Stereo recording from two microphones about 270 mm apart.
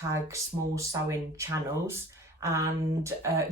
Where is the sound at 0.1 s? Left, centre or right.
Centre.